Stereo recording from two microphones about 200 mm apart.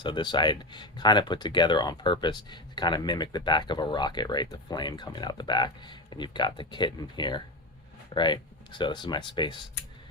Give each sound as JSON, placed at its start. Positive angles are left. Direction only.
{"t": 0.0, "sound": "speech", "side_deg": 20}